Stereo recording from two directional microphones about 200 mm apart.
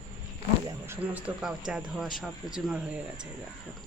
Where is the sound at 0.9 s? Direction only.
10° right (ahead or behind).